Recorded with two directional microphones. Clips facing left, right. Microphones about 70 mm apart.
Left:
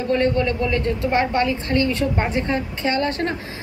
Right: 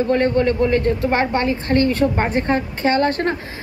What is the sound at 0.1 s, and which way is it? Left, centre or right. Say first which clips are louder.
A woman's voice: even; right.